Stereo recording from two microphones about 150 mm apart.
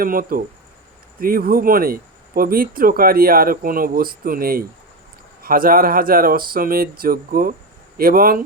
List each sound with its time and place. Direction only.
0.0 s speech: 70° right (ahead or behind)